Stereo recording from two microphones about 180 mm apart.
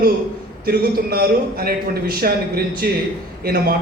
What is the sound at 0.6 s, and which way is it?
A man's voice, 60° right (ahead or behind).